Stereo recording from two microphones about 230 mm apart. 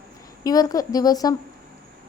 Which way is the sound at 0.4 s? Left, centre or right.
Centre.